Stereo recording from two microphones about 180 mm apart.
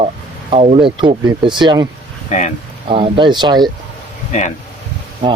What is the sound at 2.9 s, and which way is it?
Speech, 30° right (ahead or behind).